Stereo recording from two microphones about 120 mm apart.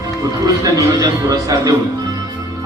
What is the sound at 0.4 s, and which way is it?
Speech, 30° right (ahead or behind).